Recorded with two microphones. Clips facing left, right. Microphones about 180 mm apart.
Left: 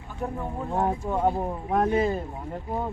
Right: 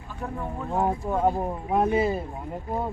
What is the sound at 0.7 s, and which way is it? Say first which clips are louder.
Speech: right 1 dB; 5° right (ahead or behind).